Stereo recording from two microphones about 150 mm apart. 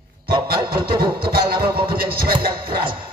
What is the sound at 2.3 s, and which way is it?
Music, 35° right (ahead or behind).